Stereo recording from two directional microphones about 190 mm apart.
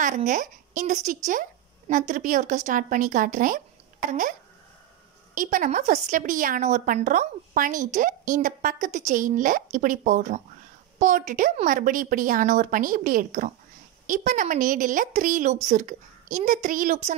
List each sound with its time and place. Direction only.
0.0 s a woman's voice: 40° right (ahead or behind)